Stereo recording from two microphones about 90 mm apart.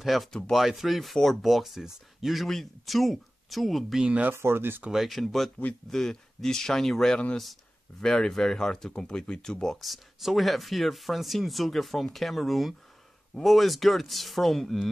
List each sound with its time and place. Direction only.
0.0 s speech: centre (ahead or behind)
4.3 s speech: 25° right (ahead or behind)
4.9 s speech: centre (ahead or behind)